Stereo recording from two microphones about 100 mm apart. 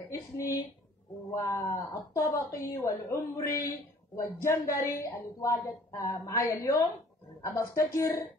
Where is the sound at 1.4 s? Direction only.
30° left (ahead or behind).